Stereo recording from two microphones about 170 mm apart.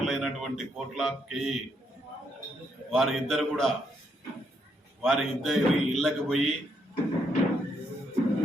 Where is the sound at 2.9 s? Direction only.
Centre (ahead or behind).